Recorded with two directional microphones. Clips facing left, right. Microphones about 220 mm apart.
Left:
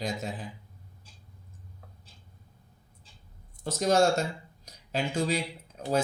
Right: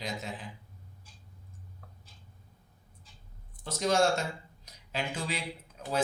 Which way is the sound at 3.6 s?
45° left (ahead or behind).